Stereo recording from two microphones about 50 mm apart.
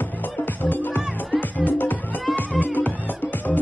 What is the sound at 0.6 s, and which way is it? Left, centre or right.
Speech, left.